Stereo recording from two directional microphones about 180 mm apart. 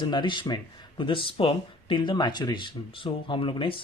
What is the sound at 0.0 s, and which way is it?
Speech, 25° left (ahead or behind).